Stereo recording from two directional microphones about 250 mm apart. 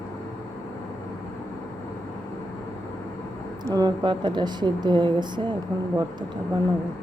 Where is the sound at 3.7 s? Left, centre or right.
Centre.